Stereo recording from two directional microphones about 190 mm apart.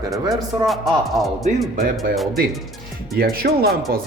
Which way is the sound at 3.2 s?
55° right (ahead or behind).